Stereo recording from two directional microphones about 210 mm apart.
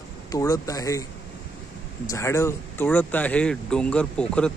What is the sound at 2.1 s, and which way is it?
Speech, 15° left (ahead or behind).